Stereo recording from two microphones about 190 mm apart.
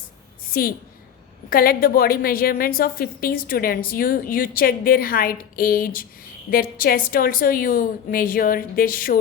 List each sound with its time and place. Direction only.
0.5 s a woman's voice: 50° left (ahead or behind)